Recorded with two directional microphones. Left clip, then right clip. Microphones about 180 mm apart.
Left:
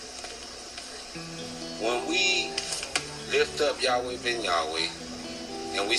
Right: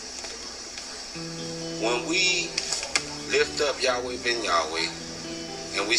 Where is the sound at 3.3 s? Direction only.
15° right (ahead or behind).